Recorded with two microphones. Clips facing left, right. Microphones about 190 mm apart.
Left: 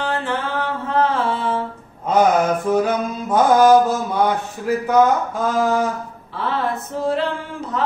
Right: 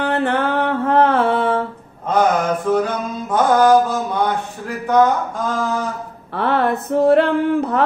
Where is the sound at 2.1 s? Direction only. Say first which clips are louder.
Left 1 dB; 10° left (ahead or behind).